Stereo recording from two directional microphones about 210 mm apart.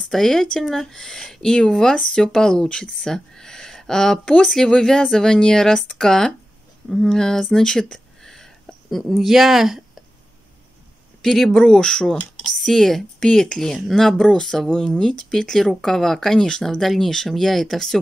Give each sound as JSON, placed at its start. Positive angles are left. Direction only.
{"t": 0.0, "sound": "speech", "side_deg": 0}
{"t": 11.2, "sound": "speech", "side_deg": 0}